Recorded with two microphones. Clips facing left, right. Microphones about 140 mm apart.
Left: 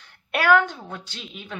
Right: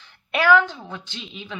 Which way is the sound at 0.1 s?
50° left (ahead or behind).